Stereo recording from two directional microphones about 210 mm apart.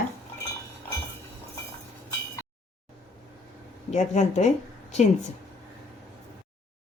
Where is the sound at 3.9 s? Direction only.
35° left (ahead or behind).